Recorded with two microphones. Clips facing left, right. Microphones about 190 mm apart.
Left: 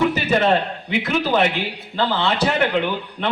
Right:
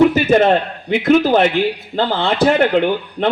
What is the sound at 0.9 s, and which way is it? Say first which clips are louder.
A man's voice: right 10 dB; 50° right (ahead or behind).